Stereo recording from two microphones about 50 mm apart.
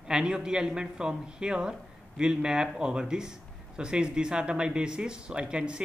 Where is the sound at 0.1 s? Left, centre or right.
Centre.